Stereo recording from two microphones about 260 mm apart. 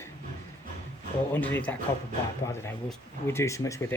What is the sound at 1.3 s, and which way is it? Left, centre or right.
Speech, centre.